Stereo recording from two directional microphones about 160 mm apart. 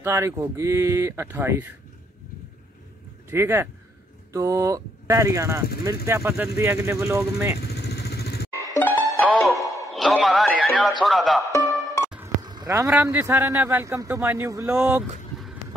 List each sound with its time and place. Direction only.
0.0 s a man's voice: 15° right (ahead or behind)
3.3 s a man's voice: 15° right (ahead or behind)
7.9 s vehicle: 90° left
8.7 s music: 15° left (ahead or behind)
9.9 s a man's voice: centre (ahead or behind)
11.5 s music: 20° left (ahead or behind)
12.4 s a man's voice: 25° right (ahead or behind)
14.8 s speech: 5° right (ahead or behind)